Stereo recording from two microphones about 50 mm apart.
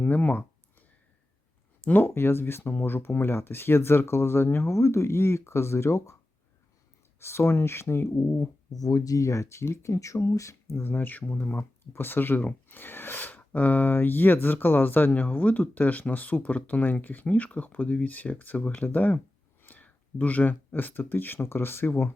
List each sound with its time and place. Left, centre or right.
0.0 s a sound: left
1.8 s speech: left
7.2 s speech: left
8.9 s speech: left
10.8 s speech: left